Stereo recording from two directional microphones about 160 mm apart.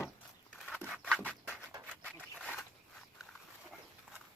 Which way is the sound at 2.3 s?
5° left (ahead or behind).